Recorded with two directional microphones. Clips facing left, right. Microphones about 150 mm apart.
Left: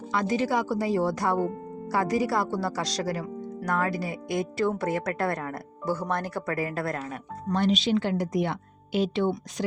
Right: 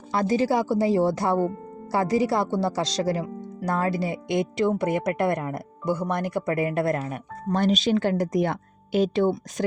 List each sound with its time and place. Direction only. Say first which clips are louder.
0.1 s speech: right 4 dB; 35° right (ahead or behind)
7.5 s a woman's voice: right 2 dB; 45° right (ahead or behind)